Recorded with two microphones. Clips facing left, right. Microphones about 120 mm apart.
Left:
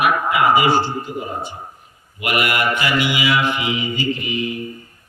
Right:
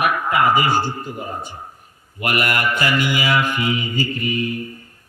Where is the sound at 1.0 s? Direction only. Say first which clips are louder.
Left 2 dB; 45° right (ahead or behind).